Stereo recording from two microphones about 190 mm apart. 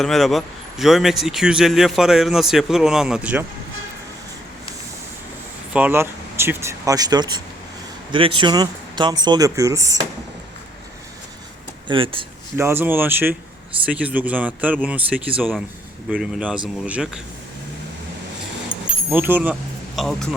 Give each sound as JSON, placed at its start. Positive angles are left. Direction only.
{"t": 0.0, "sound": "speech", "side_deg": 0}
{"t": 5.7, "sound": "speech", "side_deg": -10}
{"t": 11.9, "sound": "speech", "side_deg": -25}
{"t": 12.5, "sound": "speech", "side_deg": -10}
{"t": 19.1, "sound": "speech", "side_deg": -10}